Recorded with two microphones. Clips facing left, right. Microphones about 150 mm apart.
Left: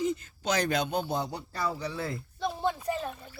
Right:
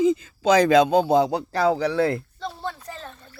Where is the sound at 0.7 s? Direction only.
90° right; by 2.2 s 70° right (ahead or behind).